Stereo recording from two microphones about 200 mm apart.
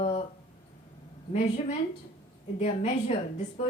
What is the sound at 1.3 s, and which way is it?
Speech, 35° left (ahead or behind).